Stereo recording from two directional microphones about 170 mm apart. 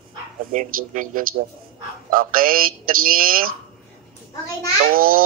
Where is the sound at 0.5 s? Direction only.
50° right (ahead or behind).